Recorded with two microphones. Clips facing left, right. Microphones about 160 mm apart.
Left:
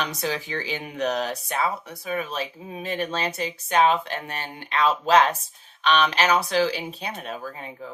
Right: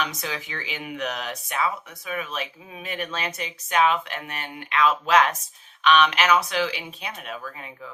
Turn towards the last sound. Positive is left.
turn(degrees=35)  # may be behind; listen again after turning